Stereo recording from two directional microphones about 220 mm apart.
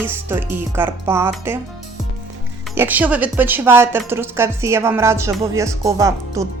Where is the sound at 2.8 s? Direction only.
10° right (ahead or behind).